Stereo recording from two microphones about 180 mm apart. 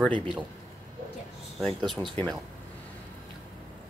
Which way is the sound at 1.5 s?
Centre (ahead or behind).